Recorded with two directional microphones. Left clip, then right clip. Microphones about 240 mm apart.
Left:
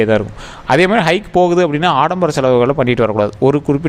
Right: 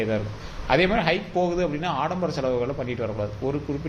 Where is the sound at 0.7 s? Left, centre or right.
Left.